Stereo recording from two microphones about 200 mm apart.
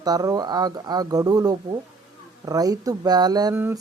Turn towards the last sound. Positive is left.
turn(degrees=-15)  # may be behind; listen again after turning